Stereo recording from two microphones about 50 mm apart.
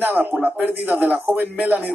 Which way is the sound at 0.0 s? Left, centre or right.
Right.